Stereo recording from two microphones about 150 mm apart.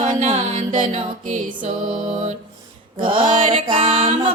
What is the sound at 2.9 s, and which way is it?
Music, 30° right (ahead or behind).